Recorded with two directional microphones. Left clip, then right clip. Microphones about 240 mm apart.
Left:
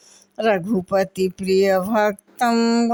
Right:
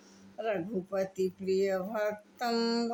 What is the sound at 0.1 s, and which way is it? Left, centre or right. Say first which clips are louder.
Speech: left 14 dB; left.